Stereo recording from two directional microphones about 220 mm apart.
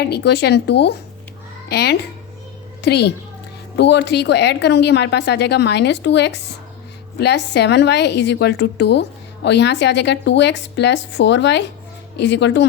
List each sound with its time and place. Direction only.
0.0 s a woman's voice: 50° left (ahead or behind)